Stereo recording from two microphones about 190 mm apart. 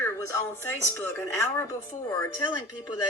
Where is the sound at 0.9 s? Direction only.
10° left (ahead or behind).